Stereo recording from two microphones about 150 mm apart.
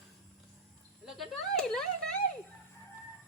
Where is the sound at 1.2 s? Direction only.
5° left (ahead or behind).